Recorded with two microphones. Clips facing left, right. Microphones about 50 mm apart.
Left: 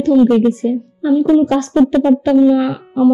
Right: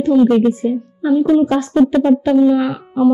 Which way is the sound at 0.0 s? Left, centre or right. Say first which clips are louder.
Left 1 dB; centre.